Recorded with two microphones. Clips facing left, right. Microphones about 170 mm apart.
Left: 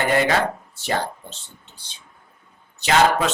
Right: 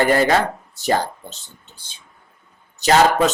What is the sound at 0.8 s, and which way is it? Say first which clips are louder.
Speech: right 5 dB; 40° right (ahead or behind).